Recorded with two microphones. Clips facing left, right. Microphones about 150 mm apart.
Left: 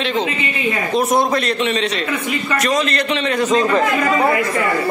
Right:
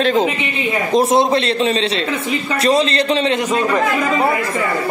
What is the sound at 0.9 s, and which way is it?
A man's voice, 25° right (ahead or behind).